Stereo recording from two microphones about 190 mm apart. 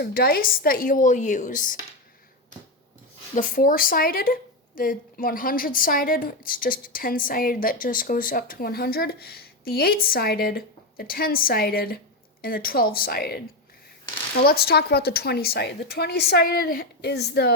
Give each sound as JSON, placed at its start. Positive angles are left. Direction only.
{"t": 0.0, "sound": "speech", "side_deg": 55}
{"t": 3.3, "sound": "speech", "side_deg": 45}
{"t": 14.4, "sound": "a woman's voice", "side_deg": 55}